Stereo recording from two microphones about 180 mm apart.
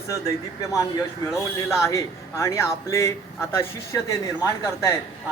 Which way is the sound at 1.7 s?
15° left (ahead or behind).